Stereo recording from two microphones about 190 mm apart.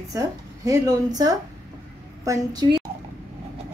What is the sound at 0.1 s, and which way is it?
Speech, 20° right (ahead or behind).